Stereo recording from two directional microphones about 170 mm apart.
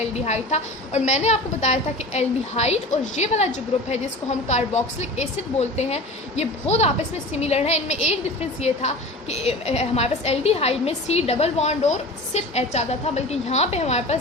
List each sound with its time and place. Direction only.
0.0 s a woman's voice: 40° left (ahead or behind)